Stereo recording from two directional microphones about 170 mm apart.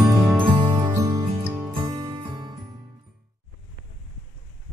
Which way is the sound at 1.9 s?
25° right (ahead or behind).